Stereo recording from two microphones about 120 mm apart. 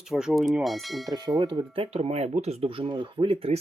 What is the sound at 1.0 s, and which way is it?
Bell, 35° right (ahead or behind).